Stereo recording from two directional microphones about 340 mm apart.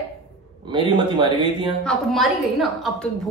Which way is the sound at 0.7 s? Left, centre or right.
Centre.